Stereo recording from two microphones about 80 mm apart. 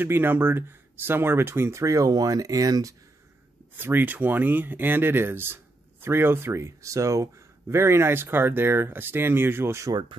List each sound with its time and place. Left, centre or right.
0.0 s speech: right
3.7 s speech: right